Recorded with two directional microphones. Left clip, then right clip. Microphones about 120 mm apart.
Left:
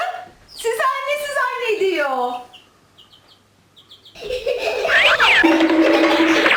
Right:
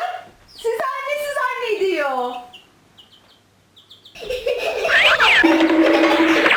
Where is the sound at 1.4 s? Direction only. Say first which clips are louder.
Left 2 dB; 5° right (ahead or behind).